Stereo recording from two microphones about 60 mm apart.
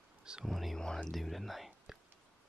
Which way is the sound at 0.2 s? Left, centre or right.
Centre.